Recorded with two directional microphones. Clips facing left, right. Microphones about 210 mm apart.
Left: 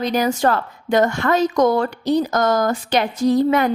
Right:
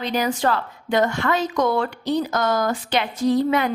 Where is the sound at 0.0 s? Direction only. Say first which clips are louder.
Left 4 dB; 45° left (ahead or behind).